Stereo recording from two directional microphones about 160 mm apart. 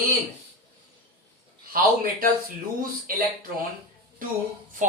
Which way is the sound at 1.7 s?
65° right (ahead or behind).